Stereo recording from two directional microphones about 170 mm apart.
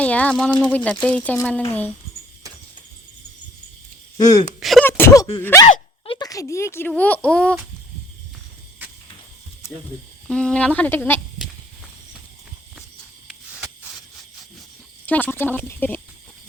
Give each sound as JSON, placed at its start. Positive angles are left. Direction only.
{"t": 0.0, "sound": "speech", "side_deg": 10}
{"t": 4.2, "sound": "speech", "side_deg": 20}
{"t": 4.6, "sound": "speech", "side_deg": 0}
{"t": 4.9, "sound": "speech", "side_deg": 15}
{"t": 5.6, "sound": "a sound", "side_deg": 30}
{"t": 6.2, "sound": "speech", "side_deg": 20}
{"t": 10.2, "sound": "speech", "side_deg": 5}
{"t": 15.0, "sound": "speech", "side_deg": 10}